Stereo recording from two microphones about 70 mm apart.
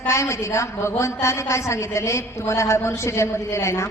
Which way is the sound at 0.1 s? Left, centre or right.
Left.